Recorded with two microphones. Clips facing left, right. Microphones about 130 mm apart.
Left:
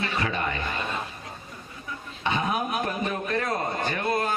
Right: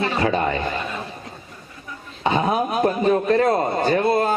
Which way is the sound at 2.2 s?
35° right (ahead or behind).